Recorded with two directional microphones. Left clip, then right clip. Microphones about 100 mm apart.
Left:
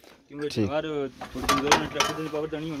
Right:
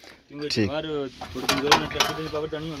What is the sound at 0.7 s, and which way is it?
Speech, 40° left (ahead or behind).